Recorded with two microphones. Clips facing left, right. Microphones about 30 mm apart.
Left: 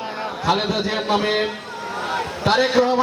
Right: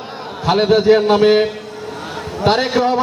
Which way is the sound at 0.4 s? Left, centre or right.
Right.